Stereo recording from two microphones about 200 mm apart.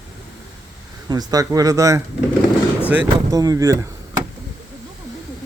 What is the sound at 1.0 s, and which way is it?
Speech, 20° right (ahead or behind).